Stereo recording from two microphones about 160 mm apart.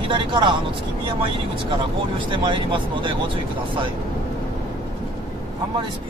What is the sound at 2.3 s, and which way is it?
Speech, 30° right (ahead or behind).